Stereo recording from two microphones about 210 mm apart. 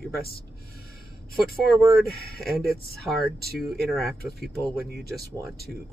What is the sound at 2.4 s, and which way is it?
Speech, centre (ahead or behind).